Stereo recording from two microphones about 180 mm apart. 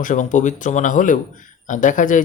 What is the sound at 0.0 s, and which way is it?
Speech, 45° left (ahead or behind).